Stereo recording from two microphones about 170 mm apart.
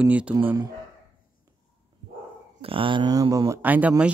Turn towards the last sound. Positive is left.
turn(degrees=-10)  # may be behind; listen again after turning